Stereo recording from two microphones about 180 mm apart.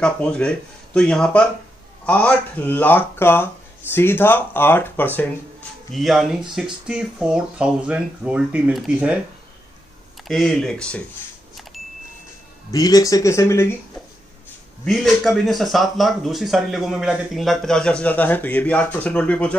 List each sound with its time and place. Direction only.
0.0 s speech: 5° left (ahead or behind)
5.9 s speech: centre (ahead or behind)
10.2 s speech: centre (ahead or behind)
12.7 s speech: 20° left (ahead or behind)
14.9 s speech: centre (ahead or behind)